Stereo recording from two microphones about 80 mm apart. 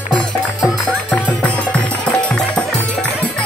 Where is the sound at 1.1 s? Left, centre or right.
Centre.